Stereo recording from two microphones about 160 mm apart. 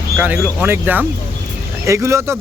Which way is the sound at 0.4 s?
10° right (ahead or behind).